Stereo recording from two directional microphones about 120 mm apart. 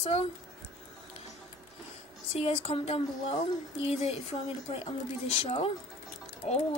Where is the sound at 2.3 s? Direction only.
60° left (ahead or behind).